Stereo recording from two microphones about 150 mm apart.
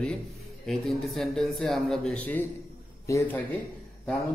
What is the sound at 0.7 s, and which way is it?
A man's voice, centre (ahead or behind).